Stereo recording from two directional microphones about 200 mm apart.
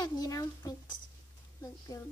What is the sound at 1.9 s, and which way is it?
Speech, 20° left (ahead or behind).